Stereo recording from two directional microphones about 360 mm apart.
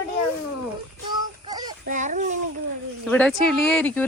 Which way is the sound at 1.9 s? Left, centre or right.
Right.